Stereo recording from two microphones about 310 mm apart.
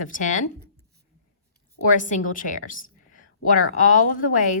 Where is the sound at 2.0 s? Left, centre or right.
Left.